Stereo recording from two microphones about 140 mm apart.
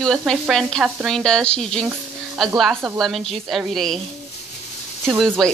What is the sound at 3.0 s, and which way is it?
Sizzle, centre (ahead or behind).